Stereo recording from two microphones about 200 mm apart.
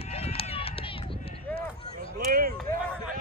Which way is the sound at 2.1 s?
50° right (ahead or behind).